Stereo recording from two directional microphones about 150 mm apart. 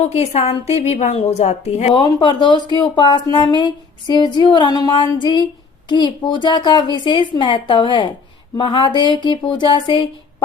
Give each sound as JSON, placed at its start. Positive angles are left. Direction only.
{"t": 0.0, "sound": "a woman's voice", "side_deg": 45}
{"t": 2.0, "sound": "speech", "side_deg": 30}